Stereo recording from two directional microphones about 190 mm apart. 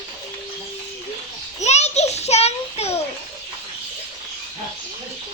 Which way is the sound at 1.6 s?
35° left (ahead or behind).